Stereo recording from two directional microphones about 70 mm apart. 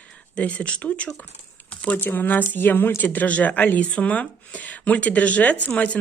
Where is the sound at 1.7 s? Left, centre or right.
Centre.